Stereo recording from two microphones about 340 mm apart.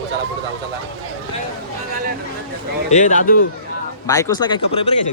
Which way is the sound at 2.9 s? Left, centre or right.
Left.